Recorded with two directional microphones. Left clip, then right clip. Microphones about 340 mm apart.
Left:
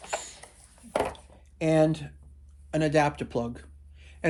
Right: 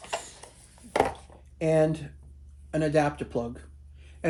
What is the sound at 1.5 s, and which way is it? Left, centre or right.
Speech, centre.